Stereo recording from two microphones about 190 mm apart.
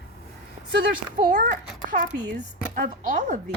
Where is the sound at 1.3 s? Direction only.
45° right (ahead or behind).